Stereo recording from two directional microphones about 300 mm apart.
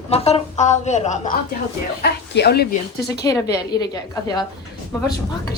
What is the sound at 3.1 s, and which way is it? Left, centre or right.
Speech, centre.